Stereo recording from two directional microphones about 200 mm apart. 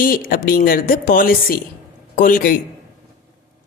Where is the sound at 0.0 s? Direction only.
45° left (ahead or behind).